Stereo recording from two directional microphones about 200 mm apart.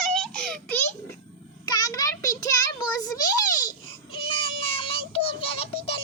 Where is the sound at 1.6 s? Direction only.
20° left (ahead or behind).